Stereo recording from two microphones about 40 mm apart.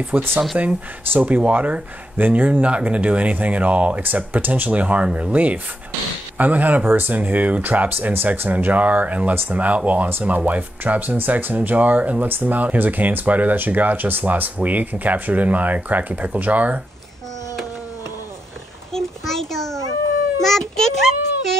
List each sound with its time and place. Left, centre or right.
0.1 s speech: right
4.0 s speech: right
8.5 s speech: right
18.9 s a sound: centre